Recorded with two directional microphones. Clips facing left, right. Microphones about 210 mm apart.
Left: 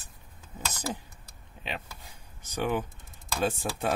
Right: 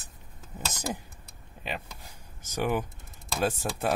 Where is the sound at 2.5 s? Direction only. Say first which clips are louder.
Right 1 dB; 10° right (ahead or behind).